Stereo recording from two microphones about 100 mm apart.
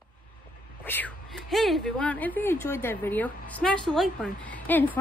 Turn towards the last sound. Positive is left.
turn(degrees=15)  # may be behind; listen again after turning